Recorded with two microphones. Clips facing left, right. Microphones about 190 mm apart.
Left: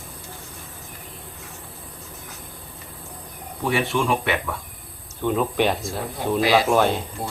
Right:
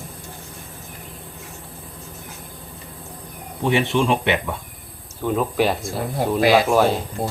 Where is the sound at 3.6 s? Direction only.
20° right (ahead or behind).